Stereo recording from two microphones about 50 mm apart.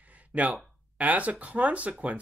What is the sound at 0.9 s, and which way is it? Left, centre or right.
Speech, right.